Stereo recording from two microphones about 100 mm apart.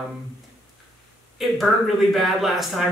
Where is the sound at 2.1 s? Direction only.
Centre (ahead or behind).